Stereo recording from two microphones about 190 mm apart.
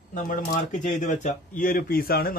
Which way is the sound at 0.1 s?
45° left (ahead or behind).